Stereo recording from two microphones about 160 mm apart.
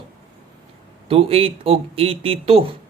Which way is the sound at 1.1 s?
35° right (ahead or behind).